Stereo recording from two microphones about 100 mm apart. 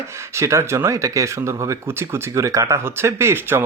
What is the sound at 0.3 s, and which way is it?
Speech, 30° right (ahead or behind).